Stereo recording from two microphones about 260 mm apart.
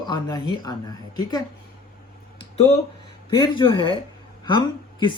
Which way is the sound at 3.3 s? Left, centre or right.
Centre.